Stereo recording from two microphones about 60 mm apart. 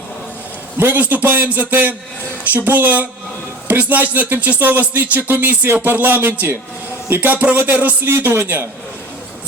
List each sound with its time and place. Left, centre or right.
0.8 s speech: right
8.1 s speech: right